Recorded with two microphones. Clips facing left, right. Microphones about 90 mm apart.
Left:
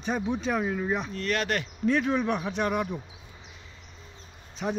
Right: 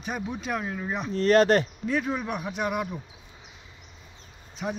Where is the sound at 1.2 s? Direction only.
35° right (ahead or behind).